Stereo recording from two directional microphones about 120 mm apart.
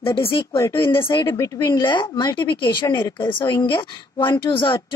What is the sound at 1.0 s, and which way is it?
Speech, 40° left (ahead or behind).